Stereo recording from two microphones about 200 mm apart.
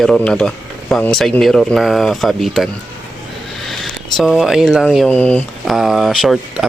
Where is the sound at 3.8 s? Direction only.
Centre (ahead or behind).